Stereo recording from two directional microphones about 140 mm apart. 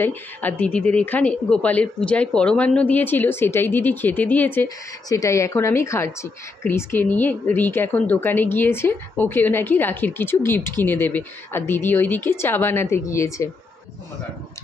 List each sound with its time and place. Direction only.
0.0 s a woman's voice: 15° left (ahead or behind)